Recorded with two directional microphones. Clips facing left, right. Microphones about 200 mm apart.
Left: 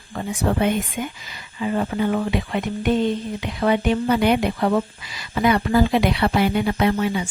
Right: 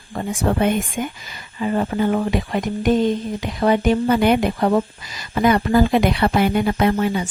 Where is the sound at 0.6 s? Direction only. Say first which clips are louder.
Right 2 dB; 50° right (ahead or behind).